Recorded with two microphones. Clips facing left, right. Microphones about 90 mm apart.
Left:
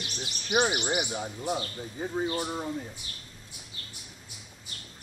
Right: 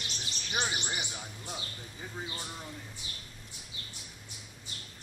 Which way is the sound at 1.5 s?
45° left (ahead or behind).